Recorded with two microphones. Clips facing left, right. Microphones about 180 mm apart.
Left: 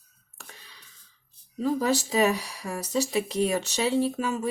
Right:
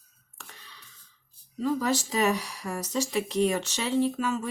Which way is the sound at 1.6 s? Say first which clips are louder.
Left 2 dB; 15° left (ahead or behind).